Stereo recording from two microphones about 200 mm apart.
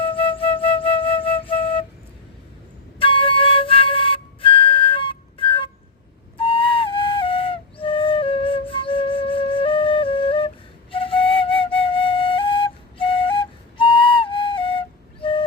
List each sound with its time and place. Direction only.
0.0 s flute: 25° left (ahead or behind)
3.0 s flute: 25° left (ahead or behind)